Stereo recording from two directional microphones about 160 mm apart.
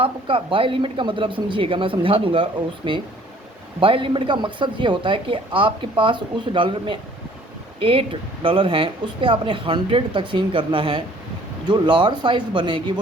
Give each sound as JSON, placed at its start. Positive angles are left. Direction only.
{"t": 0.0, "sound": "speech", "side_deg": -30}